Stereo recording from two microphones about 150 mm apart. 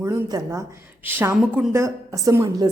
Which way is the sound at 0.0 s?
20° right (ahead or behind).